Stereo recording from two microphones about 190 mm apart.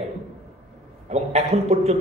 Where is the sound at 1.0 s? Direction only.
35° right (ahead or behind).